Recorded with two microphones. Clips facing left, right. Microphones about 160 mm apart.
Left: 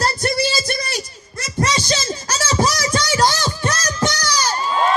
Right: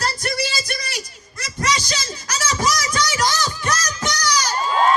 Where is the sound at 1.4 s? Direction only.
30° left (ahead or behind).